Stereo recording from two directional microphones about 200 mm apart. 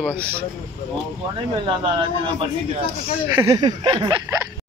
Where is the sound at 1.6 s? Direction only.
25° right (ahead or behind).